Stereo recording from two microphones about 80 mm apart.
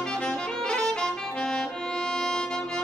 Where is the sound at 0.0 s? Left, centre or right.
Centre.